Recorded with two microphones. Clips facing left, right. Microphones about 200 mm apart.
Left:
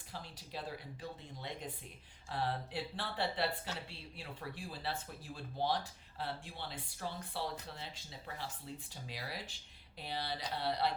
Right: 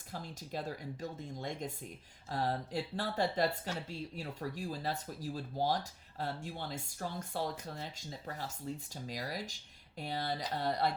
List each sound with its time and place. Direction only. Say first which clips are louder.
0.1 s speech: right 5 dB; 45° right (ahead or behind)